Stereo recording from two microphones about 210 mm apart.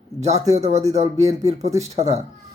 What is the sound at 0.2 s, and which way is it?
Speech, 30° right (ahead or behind).